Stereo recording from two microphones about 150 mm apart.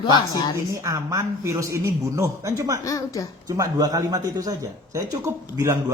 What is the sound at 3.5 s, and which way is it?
Speech, 25° right (ahead or behind).